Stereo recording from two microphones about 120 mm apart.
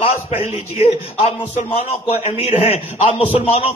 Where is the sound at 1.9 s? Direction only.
60° left (ahead or behind).